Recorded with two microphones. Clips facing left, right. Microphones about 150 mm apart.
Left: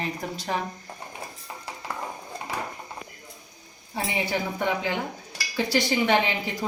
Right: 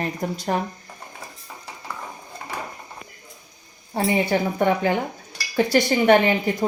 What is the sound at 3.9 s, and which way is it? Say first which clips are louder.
A woman's voice: right 7 dB; 55° right (ahead or behind).